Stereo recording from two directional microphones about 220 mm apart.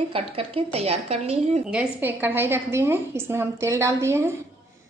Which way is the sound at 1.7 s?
10° right (ahead or behind).